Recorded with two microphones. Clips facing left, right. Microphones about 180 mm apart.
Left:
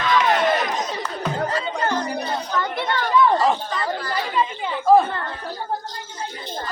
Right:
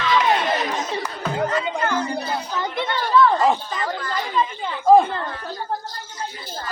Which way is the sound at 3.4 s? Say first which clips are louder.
Right 1 dB; 10° right (ahead or behind).